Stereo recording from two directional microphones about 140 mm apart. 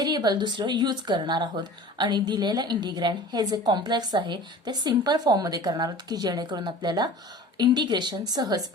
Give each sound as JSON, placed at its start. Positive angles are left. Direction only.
{"t": 0.0, "sound": "speech", "side_deg": -30}